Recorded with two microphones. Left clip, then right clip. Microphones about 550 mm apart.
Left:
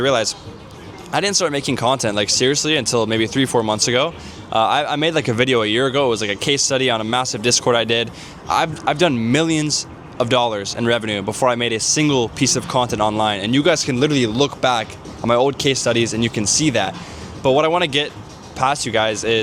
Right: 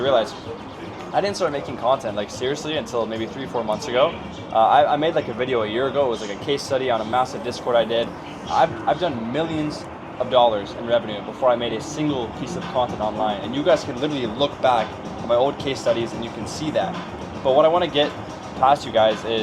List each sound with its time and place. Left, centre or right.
0.0 s speech: left
17.4 s speech: left
18.6 s speech: left